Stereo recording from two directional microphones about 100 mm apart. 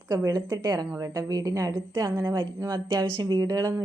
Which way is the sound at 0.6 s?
45° right (ahead or behind).